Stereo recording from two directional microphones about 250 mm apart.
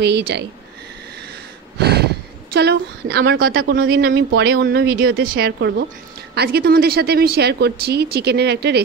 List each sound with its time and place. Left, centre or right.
0.0 s a woman's voice: right
1.8 s a sound: right
2.5 s a woman's voice: right